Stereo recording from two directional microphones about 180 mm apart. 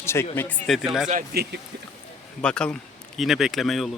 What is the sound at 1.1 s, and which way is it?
Speech, 50° right (ahead or behind).